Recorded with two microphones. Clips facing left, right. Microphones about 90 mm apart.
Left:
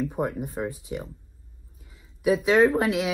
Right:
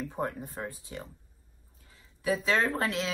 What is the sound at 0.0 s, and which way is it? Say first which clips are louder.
A woman's voice: left 6 dB; 15° left (ahead or behind).